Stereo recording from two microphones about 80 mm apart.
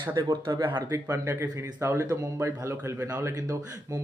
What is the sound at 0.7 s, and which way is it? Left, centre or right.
A man's voice, right.